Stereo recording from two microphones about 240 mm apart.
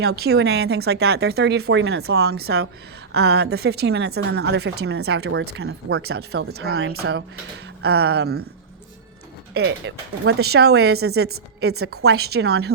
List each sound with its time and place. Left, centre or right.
0.0 s speech: right
6.7 s speech: right
7.8 s speech: right
9.6 s speech: right